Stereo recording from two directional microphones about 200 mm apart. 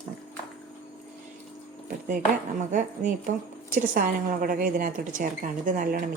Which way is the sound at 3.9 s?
45° right (ahead or behind).